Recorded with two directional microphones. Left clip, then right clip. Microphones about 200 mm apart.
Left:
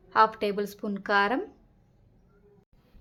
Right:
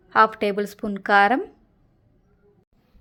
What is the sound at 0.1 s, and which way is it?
A woman's voice, 25° right (ahead or behind).